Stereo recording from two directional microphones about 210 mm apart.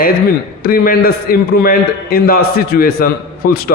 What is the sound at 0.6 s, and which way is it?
A man's voice, 45° left (ahead or behind).